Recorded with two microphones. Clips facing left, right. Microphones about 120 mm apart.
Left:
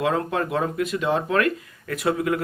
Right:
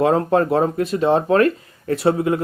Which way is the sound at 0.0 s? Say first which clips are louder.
Right 7 dB; 35° right (ahead or behind).